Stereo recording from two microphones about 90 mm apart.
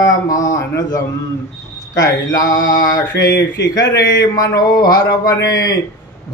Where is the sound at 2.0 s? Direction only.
40° left (ahead or behind).